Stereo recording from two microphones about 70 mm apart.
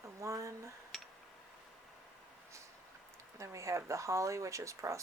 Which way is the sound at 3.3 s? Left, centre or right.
Right.